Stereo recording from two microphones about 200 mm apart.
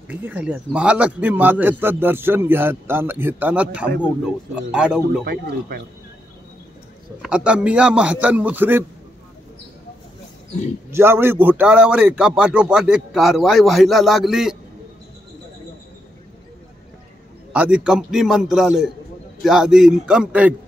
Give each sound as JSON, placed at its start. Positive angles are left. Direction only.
{"t": 0.1, "sound": "a man's voice", "side_deg": -10}
{"t": 5.2, "sound": "speech", "side_deg": -55}
{"t": 7.2, "sound": "a man's voice", "side_deg": -5}
{"t": 10.9, "sound": "a man's voice", "side_deg": -10}
{"t": 17.5, "sound": "a man's voice", "side_deg": -5}